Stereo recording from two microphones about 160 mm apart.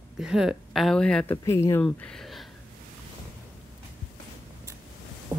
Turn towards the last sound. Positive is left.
turn(degrees=-15)  # may be behind; listen again after turning